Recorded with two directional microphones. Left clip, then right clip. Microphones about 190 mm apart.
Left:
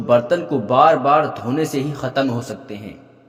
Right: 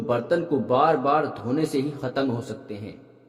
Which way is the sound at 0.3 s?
15° left (ahead or behind).